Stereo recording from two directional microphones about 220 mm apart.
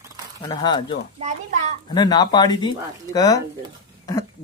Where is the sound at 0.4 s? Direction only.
20° left (ahead or behind).